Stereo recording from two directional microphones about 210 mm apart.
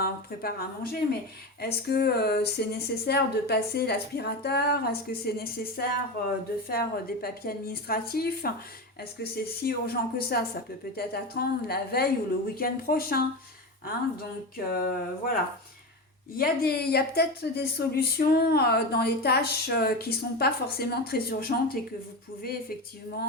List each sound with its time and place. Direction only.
0.0 s a woman's voice: 45° left (ahead or behind)
14.5 s speech: 45° left (ahead or behind)
16.4 s speech: 45° left (ahead or behind)